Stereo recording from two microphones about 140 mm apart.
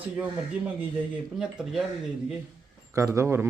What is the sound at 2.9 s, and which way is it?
Speech, 20° right (ahead or behind).